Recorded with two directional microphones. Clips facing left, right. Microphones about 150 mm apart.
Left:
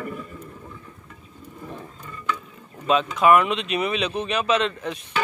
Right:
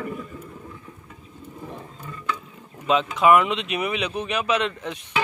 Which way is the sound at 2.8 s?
15° right (ahead or behind).